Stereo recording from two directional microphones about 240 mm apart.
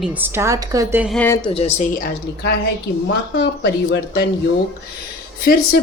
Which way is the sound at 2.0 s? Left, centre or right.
Left.